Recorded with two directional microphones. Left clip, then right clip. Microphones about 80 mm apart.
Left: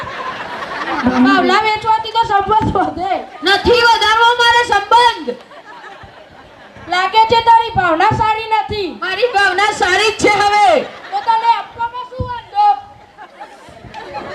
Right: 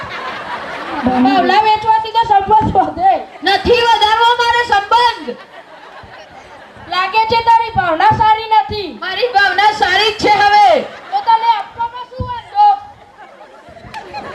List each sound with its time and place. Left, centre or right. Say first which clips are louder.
0.9 s speech: even; left
6.8 s a child's voice: left 2 dB; left